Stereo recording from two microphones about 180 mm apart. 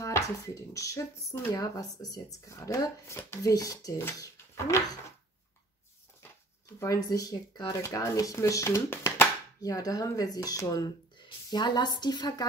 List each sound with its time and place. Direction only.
0.0 s speech: 15° left (ahead or behind)
6.8 s speech: 20° left (ahead or behind)